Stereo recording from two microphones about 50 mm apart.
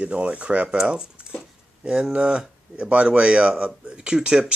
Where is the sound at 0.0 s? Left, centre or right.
Right.